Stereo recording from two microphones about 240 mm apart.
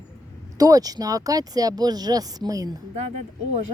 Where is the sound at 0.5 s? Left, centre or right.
Centre.